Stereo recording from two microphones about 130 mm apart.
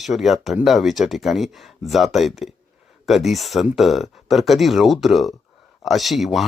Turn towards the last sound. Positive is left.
turn(degrees=0)  # may be behind; listen again after turning